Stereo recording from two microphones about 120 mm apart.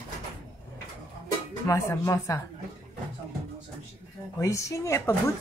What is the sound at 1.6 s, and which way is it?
Speech, 25° left (ahead or behind).